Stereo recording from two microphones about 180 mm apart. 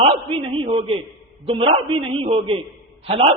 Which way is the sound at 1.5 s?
30° right (ahead or behind).